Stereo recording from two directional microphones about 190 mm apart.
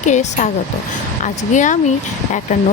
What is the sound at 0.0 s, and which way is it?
Speech, 40° left (ahead or behind).